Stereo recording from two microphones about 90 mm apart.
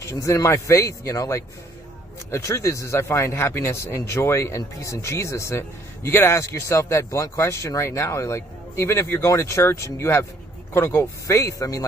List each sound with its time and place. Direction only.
0.0 s speech: 35° left (ahead or behind)